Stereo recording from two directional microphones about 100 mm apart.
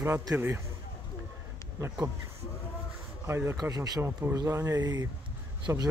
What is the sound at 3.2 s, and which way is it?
Speech, 25° right (ahead or behind).